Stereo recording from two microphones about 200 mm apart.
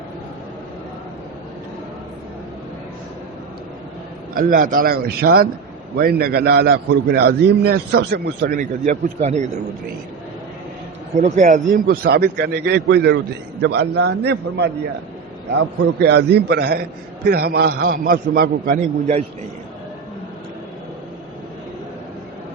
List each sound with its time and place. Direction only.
4.4 s a man's voice: 40° right (ahead or behind)
11.2 s a man's voice: 35° right (ahead or behind)